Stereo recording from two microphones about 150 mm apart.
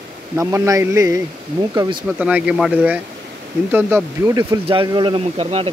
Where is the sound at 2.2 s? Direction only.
5° right (ahead or behind).